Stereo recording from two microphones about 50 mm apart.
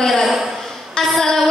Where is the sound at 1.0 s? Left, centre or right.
Centre.